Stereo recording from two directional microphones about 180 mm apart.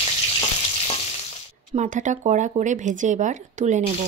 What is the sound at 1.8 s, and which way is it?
Speech, 45° right (ahead or behind).